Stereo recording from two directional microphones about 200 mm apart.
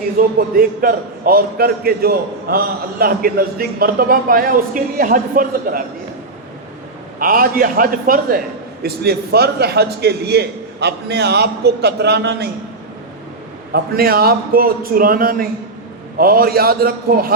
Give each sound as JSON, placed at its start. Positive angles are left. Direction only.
{"t": 0.2, "sound": "a man's voice", "side_deg": -45}
{"t": 7.2, "sound": "a man's voice", "side_deg": -45}
{"t": 13.7, "sound": "a man's voice", "side_deg": -50}